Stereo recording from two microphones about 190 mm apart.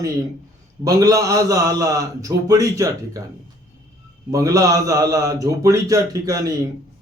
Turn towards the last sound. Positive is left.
turn(degrees=-20)  # may be behind; listen again after turning